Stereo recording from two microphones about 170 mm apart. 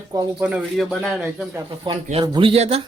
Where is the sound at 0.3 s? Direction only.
5° right (ahead or behind).